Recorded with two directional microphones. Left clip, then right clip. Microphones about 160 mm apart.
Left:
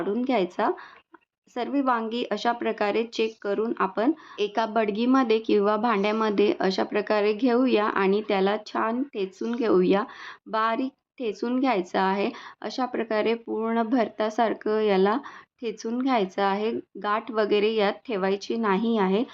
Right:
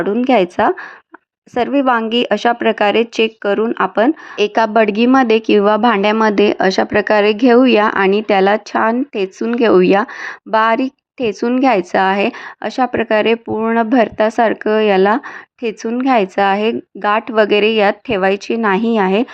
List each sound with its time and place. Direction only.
0.0 s speech: 45° right (ahead or behind)